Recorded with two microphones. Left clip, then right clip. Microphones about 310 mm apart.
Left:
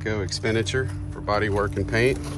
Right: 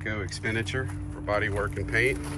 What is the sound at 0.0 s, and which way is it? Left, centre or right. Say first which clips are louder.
Speech: left 5 dB; centre.